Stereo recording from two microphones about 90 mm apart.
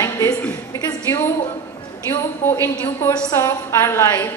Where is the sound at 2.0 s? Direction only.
30° left (ahead or behind).